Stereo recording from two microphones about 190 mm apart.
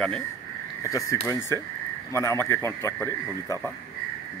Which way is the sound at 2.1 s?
15° left (ahead or behind).